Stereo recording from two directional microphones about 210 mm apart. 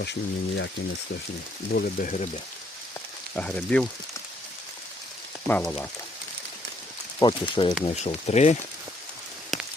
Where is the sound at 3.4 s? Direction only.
5° left (ahead or behind).